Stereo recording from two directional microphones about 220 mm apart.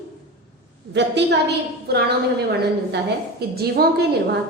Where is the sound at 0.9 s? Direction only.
50° right (ahead or behind).